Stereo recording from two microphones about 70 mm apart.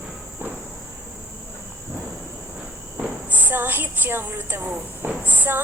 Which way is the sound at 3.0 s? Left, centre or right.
Right.